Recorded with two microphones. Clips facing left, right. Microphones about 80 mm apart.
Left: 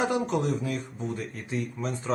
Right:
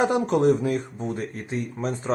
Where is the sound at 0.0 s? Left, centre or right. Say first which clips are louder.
Right 6 dB; right.